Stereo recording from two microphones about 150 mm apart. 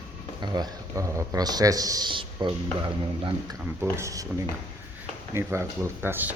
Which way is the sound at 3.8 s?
20° right (ahead or behind).